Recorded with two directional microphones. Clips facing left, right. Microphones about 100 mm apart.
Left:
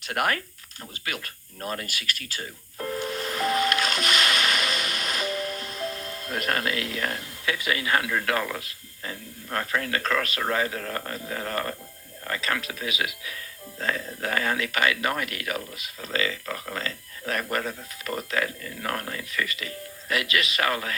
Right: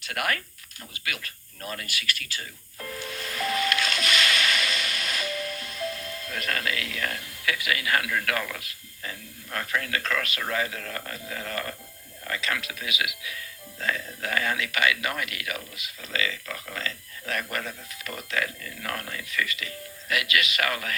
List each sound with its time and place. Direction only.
0.0 s speech: 40° left (ahead or behind)